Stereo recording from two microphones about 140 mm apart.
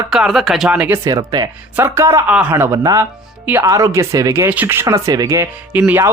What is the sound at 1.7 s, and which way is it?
Speech, 15° right (ahead or behind).